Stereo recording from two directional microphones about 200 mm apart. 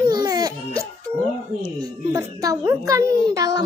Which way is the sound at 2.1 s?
15° right (ahead or behind).